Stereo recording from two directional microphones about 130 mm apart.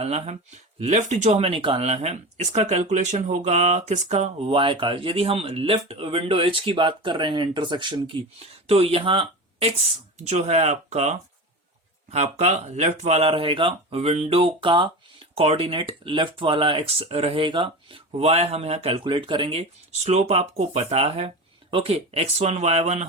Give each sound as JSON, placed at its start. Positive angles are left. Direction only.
{"t": 0.0, "sound": "speech", "side_deg": -50}
{"t": 4.4, "sound": "speech", "side_deg": -40}
{"t": 8.6, "sound": "speech", "side_deg": -50}
{"t": 10.2, "sound": "speech", "side_deg": -60}
{"t": 19.9, "sound": "speech", "side_deg": -55}